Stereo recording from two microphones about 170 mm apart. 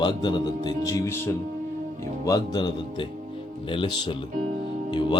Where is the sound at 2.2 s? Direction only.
25° left (ahead or behind).